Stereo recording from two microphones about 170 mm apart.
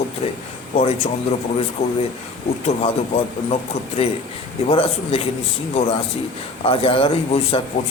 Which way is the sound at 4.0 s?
35° left (ahead or behind).